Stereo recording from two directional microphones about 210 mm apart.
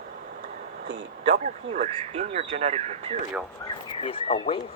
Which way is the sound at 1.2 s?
35° right (ahead or behind).